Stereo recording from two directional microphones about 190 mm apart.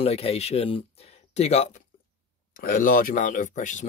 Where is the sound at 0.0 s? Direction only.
30° left (ahead or behind).